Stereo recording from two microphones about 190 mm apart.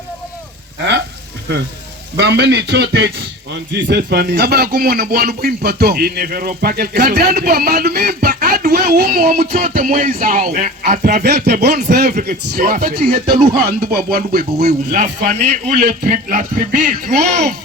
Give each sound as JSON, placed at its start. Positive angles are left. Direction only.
{"t": 2.1, "sound": "a man's voice", "side_deg": -60}
{"t": 9.4, "sound": "speech", "side_deg": -40}
{"t": 11.2, "sound": "a man's voice", "side_deg": -60}
{"t": 13.1, "sound": "speech", "side_deg": -35}
{"t": 13.6, "sound": "speech", "side_deg": -55}